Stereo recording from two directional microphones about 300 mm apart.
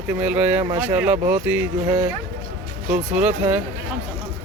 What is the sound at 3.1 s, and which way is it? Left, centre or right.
Speech, centre.